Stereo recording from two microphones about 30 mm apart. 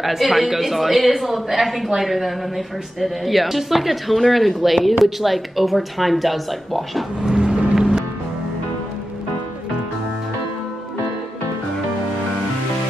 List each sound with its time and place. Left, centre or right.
0.0 s a woman's voice: centre
7.2 s vehicle: right